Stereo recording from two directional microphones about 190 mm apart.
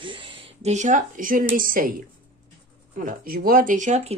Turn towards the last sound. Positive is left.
turn(degrees=-40)  # may be behind; listen again after turning